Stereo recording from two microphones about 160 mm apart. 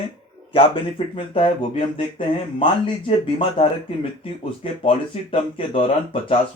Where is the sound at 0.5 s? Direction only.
35° left (ahead or behind).